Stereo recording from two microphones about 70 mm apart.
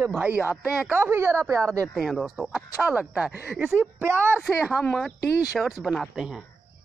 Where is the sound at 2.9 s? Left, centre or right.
Centre.